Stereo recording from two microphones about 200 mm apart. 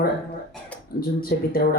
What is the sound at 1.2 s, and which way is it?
Speech, 45° left (ahead or behind).